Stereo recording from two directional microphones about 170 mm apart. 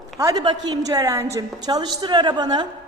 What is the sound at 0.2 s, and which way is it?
A woman's voice, 20° right (ahead or behind).